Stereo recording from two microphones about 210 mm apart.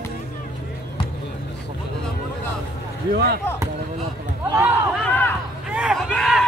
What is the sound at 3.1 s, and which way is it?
Speech, 50° right (ahead or behind).